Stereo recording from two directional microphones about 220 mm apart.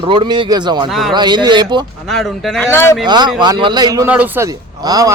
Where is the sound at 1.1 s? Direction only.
20° right (ahead or behind).